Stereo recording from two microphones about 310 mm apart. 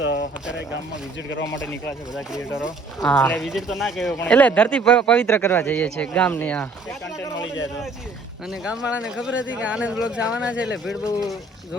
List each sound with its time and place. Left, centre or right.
0.0 s a sound: left
2.1 s speech: centre
8.6 s speech: centre